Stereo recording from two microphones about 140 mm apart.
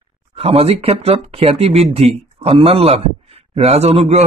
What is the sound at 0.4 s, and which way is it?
A man's voice, 45° right (ahead or behind).